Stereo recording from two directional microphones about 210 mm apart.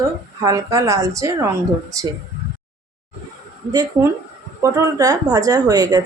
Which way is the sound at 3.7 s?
20° right (ahead or behind).